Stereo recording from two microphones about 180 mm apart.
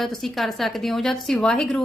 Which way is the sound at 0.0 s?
Centre (ahead or behind).